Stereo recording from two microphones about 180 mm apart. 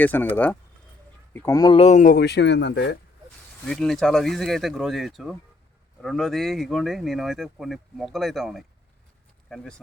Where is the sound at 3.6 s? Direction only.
Centre (ahead or behind).